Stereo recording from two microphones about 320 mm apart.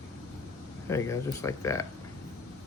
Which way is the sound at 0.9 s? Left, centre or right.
Centre.